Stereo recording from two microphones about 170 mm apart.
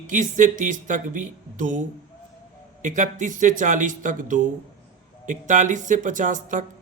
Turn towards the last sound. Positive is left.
turn(degrees=-50)  # may be behind; listen again after turning